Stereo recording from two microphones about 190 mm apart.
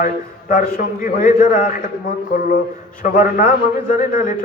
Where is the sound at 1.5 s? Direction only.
45° left (ahead or behind).